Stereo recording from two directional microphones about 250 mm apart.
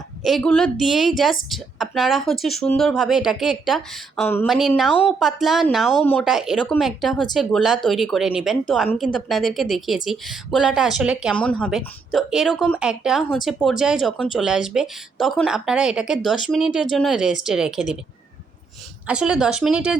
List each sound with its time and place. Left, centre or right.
0.3 s a woman's voice: centre
19.0 s a woman's voice: centre